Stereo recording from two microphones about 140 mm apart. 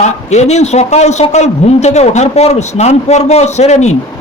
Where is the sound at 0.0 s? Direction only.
55° left (ahead or behind).